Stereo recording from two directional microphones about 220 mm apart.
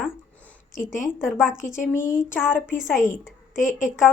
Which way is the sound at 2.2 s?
10° left (ahead or behind).